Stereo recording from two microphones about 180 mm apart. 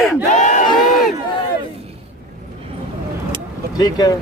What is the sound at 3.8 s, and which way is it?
Speech, 20° left (ahead or behind).